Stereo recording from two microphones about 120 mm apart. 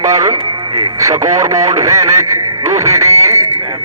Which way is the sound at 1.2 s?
80° right.